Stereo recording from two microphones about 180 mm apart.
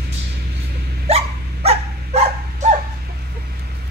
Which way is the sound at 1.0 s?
35° right (ahead or behind).